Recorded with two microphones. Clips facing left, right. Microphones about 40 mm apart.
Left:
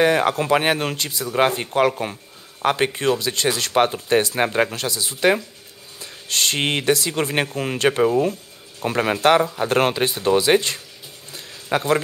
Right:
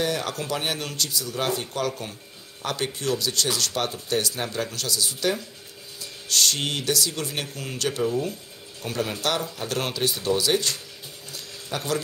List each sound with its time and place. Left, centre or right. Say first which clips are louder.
0.0 s speech: left 9 dB; left
1.3 s speech: left 11 dB; left
9.5 s speech: left 10 dB; left
11.3 s a sound: left 9 dB; left